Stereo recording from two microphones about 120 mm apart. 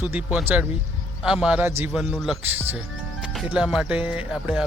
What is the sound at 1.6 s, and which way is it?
Speech, 20° right (ahead or behind).